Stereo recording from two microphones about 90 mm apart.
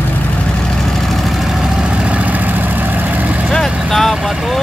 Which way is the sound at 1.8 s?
10° right (ahead or behind).